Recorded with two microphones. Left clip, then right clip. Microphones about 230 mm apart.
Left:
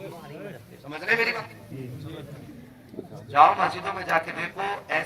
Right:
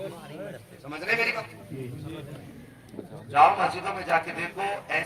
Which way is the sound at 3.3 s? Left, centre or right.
Right.